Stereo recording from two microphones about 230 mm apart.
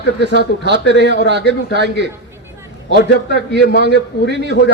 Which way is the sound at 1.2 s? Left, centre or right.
Right.